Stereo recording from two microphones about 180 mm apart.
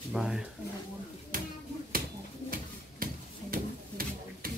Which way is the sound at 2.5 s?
55° right (ahead or behind).